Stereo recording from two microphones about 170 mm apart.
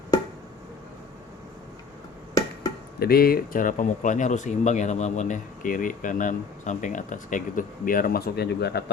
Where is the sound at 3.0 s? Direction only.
60° left (ahead or behind).